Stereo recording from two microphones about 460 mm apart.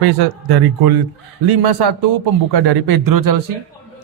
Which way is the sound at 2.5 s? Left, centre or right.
Right.